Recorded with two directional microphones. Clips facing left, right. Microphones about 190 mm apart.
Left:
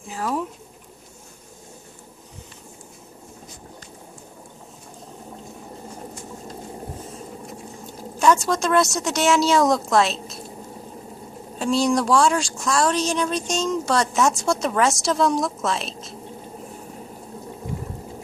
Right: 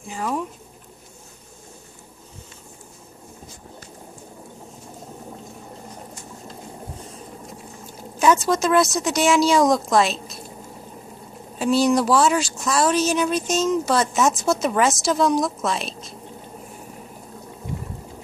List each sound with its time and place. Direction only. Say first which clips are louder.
0.0 s speech: even; centre (ahead or behind)
8.2 s speech: right 1 dB; centre (ahead or behind)
11.5 s speech: right 2 dB; 5° right (ahead or behind)